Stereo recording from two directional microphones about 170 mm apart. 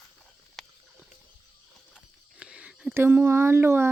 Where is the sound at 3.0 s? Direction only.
15° right (ahead or behind).